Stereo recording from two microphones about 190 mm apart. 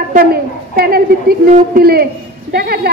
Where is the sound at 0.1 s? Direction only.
50° right (ahead or behind).